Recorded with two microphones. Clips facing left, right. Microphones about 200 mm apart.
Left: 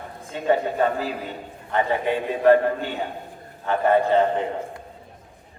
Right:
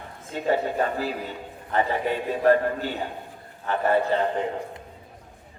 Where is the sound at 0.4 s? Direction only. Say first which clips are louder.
Left 3 dB; 40° right (ahead or behind).